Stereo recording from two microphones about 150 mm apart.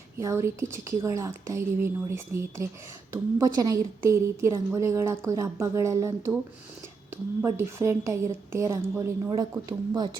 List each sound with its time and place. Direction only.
0.2 s a woman's voice: 20° right (ahead or behind)
7.4 s a woman's voice: 20° right (ahead or behind)